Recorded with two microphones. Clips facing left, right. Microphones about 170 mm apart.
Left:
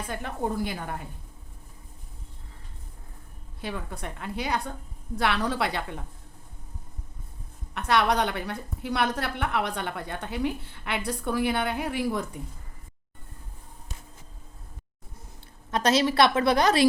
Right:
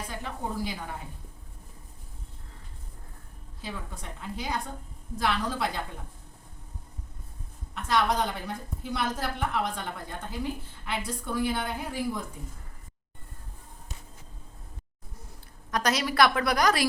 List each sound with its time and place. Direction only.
0.1 s a woman's voice: 55° left (ahead or behind)
3.6 s a woman's voice: 65° left (ahead or behind)
7.7 s a woman's voice: 70° left (ahead or behind)
15.7 s a woman's voice: 25° left (ahead or behind)